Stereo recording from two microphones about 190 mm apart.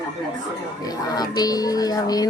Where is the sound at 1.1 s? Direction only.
20° left (ahead or behind).